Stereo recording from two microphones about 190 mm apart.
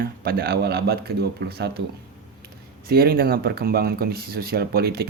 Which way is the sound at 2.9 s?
55° right (ahead or behind).